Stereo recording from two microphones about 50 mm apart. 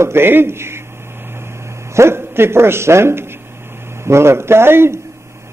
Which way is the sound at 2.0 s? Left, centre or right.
Right.